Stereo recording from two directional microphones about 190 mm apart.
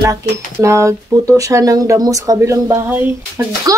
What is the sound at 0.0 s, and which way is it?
Speech, 15° right (ahead or behind).